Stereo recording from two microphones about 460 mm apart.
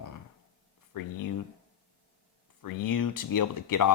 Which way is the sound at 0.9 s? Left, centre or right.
Left.